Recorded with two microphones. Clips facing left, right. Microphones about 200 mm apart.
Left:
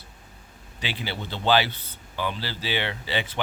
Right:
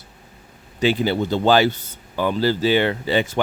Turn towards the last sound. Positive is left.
turn(degrees=-45)  # may be behind; listen again after turning